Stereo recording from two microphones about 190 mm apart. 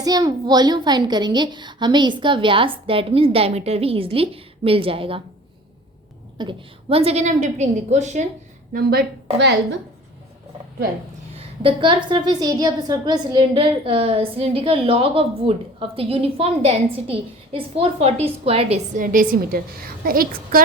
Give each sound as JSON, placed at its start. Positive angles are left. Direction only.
{"t": 0.0, "sound": "a woman's voice", "side_deg": -20}
{"t": 6.3, "sound": "a woman's voice", "side_deg": -25}
{"t": 8.7, "sound": "a woman's voice", "side_deg": -50}
{"t": 11.3, "sound": "a woman's voice", "side_deg": -25}